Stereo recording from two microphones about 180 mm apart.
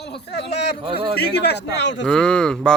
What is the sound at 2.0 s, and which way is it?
Speech, 5° left (ahead or behind).